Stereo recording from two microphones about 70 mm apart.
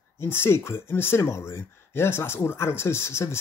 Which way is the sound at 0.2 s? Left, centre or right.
Left.